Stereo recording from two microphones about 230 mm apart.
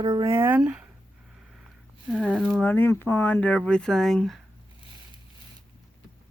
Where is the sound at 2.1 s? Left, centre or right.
Centre.